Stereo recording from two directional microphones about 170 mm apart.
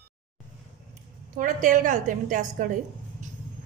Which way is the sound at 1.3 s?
50° right (ahead or behind).